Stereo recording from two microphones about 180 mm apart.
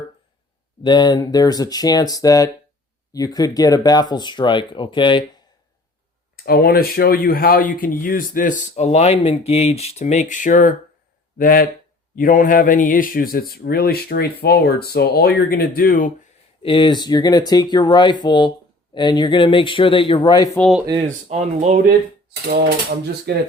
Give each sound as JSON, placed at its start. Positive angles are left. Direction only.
{"t": 0.8, "sound": "speech", "side_deg": 25}
{"t": 6.3, "sound": "speech", "side_deg": 55}
{"t": 16.6, "sound": "speech", "side_deg": 30}
{"t": 20.6, "sound": "speech", "side_deg": 0}
{"t": 21.2, "sound": "speech", "side_deg": -40}
{"t": 23.3, "sound": "speech", "side_deg": -65}